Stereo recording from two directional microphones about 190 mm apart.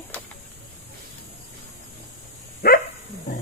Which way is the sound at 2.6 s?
55° left (ahead or behind).